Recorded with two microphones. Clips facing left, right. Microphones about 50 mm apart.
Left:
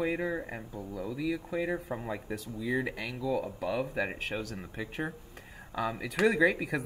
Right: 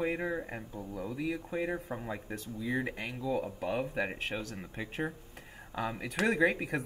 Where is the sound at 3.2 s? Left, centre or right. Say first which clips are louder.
Left 2 dB; right.